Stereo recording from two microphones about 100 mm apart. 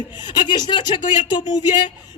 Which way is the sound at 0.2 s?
50° left (ahead or behind).